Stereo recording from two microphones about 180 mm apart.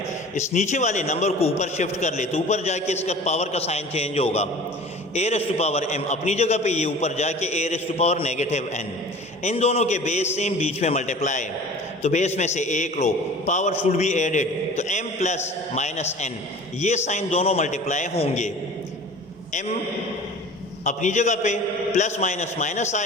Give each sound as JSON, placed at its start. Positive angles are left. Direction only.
{"t": 0.3, "sound": "a man's voice", "side_deg": 40}
{"t": 20.8, "sound": "a man's voice", "side_deg": 40}